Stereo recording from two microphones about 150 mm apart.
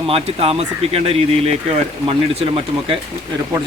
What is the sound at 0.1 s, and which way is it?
Speech, 40° right (ahead or behind).